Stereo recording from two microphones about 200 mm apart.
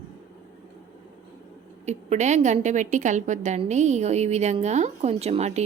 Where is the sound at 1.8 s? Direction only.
35° right (ahead or behind).